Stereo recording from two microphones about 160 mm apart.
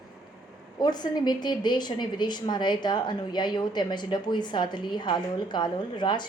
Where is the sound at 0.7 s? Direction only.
25° left (ahead or behind).